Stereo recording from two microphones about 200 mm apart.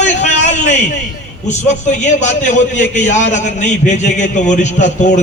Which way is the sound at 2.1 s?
35° left (ahead or behind).